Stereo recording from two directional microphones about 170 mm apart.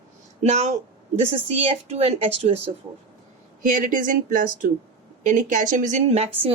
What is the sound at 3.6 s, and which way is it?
Speech, 50° right (ahead or behind).